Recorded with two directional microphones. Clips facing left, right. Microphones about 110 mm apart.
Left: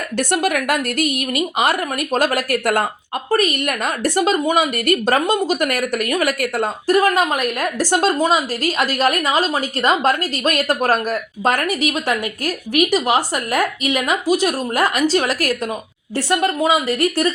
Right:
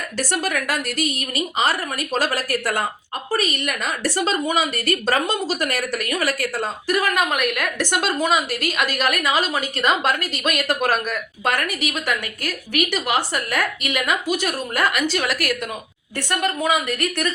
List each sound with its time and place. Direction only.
0.2 s a woman's voice: 50° left (ahead or behind)
16.1 s a woman's voice: 25° left (ahead or behind)